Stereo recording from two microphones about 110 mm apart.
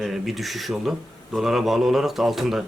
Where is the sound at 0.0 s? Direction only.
Centre (ahead or behind).